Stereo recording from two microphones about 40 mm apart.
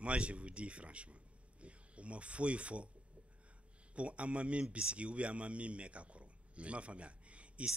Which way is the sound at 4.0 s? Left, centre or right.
Right.